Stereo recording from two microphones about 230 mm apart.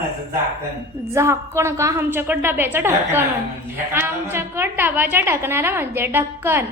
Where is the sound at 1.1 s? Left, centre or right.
Centre.